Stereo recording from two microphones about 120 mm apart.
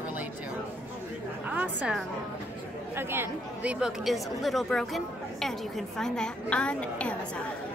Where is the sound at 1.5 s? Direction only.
15° right (ahead or behind).